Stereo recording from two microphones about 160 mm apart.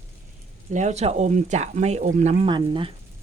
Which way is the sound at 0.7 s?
45° right (ahead or behind).